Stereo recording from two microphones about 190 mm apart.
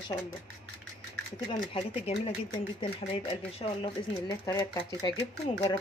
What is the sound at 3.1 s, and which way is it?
Speech, 35° left (ahead or behind).